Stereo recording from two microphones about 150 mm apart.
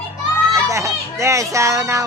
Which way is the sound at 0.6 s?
20° right (ahead or behind).